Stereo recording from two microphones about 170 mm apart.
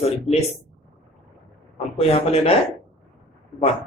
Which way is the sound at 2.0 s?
35° left (ahead or behind).